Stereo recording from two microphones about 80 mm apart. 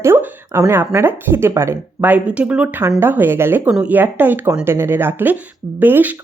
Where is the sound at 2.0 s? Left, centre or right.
Centre.